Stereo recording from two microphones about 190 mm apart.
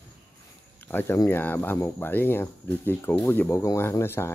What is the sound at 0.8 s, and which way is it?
Speech, 10° left (ahead or behind).